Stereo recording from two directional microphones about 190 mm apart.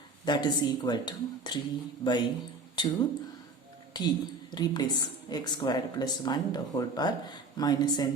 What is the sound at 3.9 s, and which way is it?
A woman's voice, 20° left (ahead or behind).